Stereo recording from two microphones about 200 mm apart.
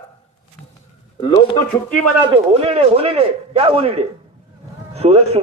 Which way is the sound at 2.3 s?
30° right (ahead or behind).